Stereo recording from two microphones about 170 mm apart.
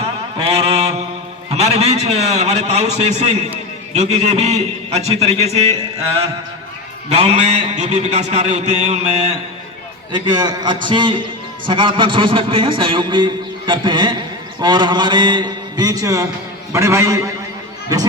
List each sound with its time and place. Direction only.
0.0 s a sound: 35° right (ahead or behind)
1.5 s a man's voice: 35° right (ahead or behind)
7.2 s a man's voice: 40° right (ahead or behind)
10.1 s a man's voice: 25° right (ahead or behind)